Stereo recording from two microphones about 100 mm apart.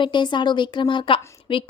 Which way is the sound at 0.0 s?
50° left (ahead or behind).